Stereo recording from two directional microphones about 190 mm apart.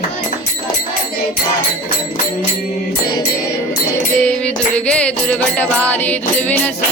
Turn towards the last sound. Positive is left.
turn(degrees=5)  # may be behind; listen again after turning